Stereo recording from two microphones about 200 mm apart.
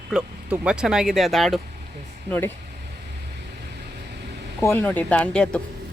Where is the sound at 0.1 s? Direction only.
5° right (ahead or behind).